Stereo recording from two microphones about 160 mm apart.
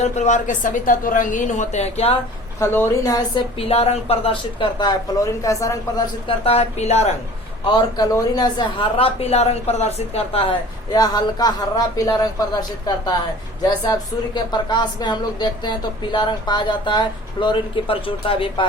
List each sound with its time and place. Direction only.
0.0 s a woman's voice: 50° left (ahead or behind)
2.6 s speech: 15° left (ahead or behind)
3.6 s speech: 40° left (ahead or behind); by 5.7 s 20° left (ahead or behind)
6.2 s speech: 35° left (ahead or behind)
7.6 s speech: 30° left (ahead or behind)
10.9 s speech: 25° left (ahead or behind)
14.3 s speech: 30° left (ahead or behind)